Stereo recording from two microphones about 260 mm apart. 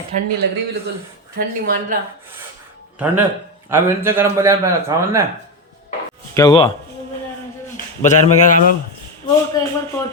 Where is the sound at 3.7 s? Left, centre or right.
Centre.